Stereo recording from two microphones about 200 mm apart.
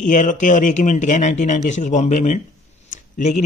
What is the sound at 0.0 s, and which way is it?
A man's voice, 40° left (ahead or behind).